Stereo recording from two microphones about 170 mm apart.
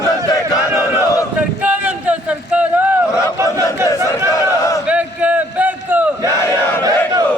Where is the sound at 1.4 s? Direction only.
10° right (ahead or behind).